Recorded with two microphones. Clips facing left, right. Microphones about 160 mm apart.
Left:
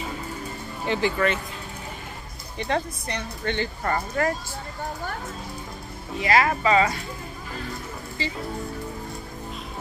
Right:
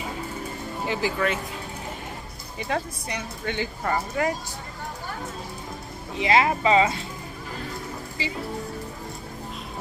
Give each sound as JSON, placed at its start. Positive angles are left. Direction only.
{"t": 0.8, "sound": "speech", "side_deg": -5}
{"t": 2.6, "sound": "speech", "side_deg": -5}
{"t": 6.1, "sound": "speech", "side_deg": -20}
{"t": 8.2, "sound": "speech", "side_deg": -10}